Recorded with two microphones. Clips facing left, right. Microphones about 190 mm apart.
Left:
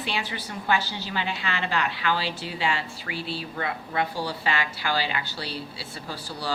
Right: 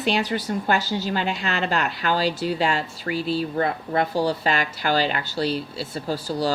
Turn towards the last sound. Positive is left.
turn(degrees=-40)  # may be behind; listen again after turning